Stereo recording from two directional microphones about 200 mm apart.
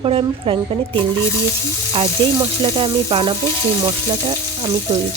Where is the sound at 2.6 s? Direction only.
25° right (ahead or behind).